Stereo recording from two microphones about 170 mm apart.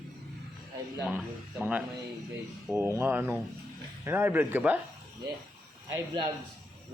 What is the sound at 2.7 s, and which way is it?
A man's voice, 15° right (ahead or behind).